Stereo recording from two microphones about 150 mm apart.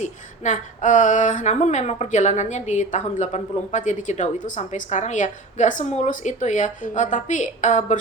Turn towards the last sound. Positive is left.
turn(degrees=50)  # may be behind; listen again after turning